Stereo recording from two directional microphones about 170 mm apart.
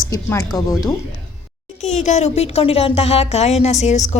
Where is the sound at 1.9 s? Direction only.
40° left (ahead or behind).